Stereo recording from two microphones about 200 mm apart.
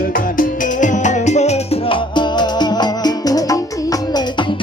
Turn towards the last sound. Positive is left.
turn(degrees=20)  # may be behind; listen again after turning